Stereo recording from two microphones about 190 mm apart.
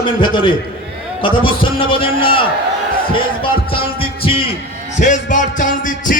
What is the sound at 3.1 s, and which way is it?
Music, 30° left (ahead or behind).